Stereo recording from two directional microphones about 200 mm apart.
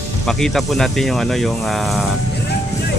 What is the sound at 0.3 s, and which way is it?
Speech, centre (ahead or behind).